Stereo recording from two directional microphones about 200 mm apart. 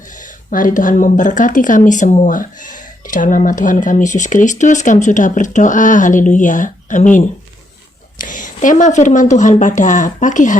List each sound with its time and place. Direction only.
0.1 s speech: 40° left (ahead or behind)